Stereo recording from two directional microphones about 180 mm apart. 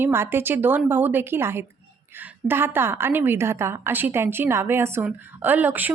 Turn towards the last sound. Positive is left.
turn(degrees=-10)  # may be behind; listen again after turning